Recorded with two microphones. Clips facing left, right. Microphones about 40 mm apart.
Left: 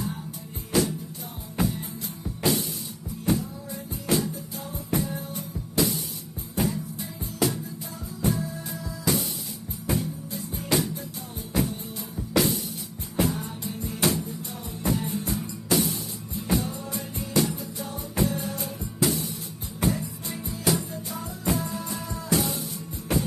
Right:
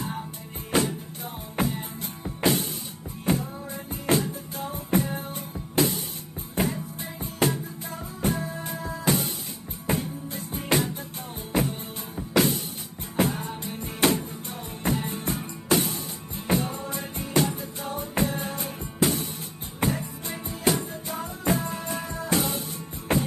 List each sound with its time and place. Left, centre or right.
0.7 s music: right
13.1 s music: right